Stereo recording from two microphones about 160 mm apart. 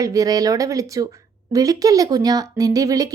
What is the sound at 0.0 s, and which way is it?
Speech, 20° right (ahead or behind).